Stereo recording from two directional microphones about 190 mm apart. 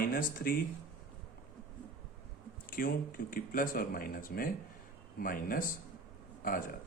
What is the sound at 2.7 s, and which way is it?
Speech, 50° left (ahead or behind).